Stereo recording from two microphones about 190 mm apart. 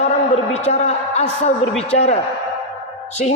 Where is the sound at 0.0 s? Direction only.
35° left (ahead or behind).